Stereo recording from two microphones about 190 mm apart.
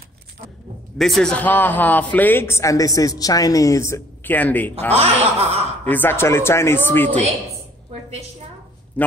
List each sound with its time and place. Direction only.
0.9 s a man's voice: centre (ahead or behind)
4.9 s speech: 30° right (ahead or behind)
5.9 s a man's voice: 10° left (ahead or behind)
9.0 s a man's voice: 10° left (ahead or behind)